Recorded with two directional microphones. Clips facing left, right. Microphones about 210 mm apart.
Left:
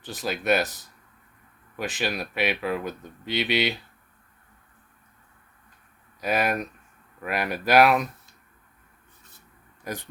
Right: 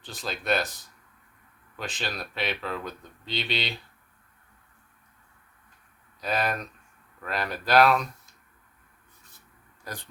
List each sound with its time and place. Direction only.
0.1 s speech: 15° left (ahead or behind)
1.7 s speech: 10° left (ahead or behind)
6.1 s speech: 10° left (ahead or behind)
9.8 s speech: 15° left (ahead or behind)